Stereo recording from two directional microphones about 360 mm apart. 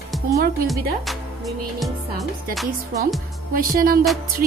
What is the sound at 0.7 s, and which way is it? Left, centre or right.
Speech, centre.